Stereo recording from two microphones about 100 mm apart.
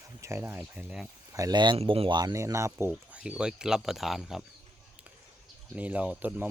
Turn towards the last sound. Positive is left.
turn(degrees=-15)  # may be behind; listen again after turning